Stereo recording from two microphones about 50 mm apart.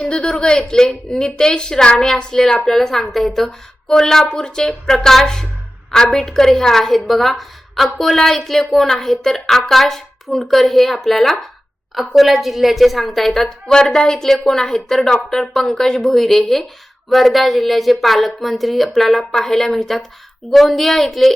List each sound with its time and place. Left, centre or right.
0.0 s a woman's voice: centre